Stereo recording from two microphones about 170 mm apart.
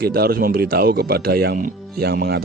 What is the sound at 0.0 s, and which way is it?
Speech, 65° right (ahead or behind).